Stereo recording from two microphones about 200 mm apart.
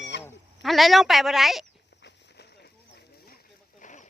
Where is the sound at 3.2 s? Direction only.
45° left (ahead or behind).